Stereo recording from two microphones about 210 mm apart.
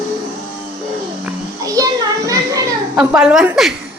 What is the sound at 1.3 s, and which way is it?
Children playing, 15° right (ahead or behind).